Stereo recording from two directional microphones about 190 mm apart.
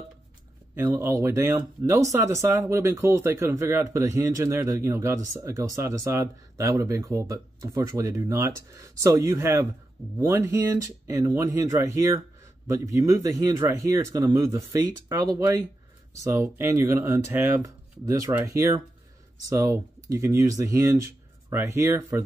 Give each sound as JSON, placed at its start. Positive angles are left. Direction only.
{"t": 0.7, "sound": "speech", "side_deg": -15}